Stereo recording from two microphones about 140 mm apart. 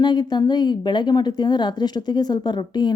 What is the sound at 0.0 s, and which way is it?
A woman's voice, 30° left (ahead or behind).